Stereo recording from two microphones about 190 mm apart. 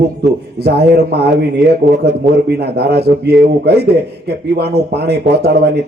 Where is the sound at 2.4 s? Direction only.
60° right (ahead or behind).